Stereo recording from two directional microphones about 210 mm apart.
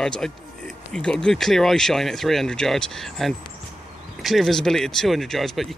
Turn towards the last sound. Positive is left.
turn(degrees=0)  # may be behind; listen again after turning